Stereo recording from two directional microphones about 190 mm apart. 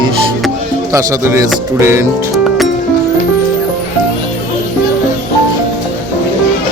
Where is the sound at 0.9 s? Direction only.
15° right (ahead or behind).